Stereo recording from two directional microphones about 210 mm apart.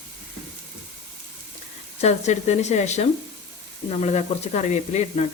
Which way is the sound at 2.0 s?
35° left (ahead or behind).